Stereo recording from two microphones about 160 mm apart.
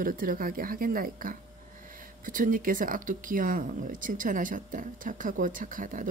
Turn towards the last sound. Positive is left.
turn(degrees=-55)  # may be behind; listen again after turning